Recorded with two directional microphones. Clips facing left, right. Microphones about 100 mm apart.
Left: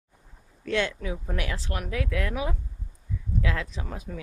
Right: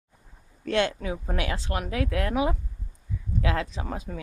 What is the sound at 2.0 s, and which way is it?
Speech, 40° right (ahead or behind).